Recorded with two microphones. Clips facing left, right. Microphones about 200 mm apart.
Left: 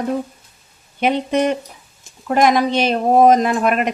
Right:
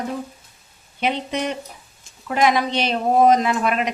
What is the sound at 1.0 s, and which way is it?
Speech, 50° left (ahead or behind).